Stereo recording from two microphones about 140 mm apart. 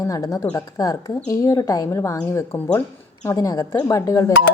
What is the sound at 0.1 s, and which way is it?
Speech, 20° left (ahead or behind).